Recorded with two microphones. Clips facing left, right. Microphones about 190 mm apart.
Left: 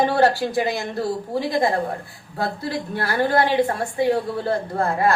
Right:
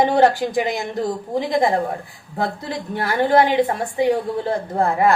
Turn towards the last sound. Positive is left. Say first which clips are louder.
# right 3 dB
turn(degrees=-20)  # may be behind; listen again after turning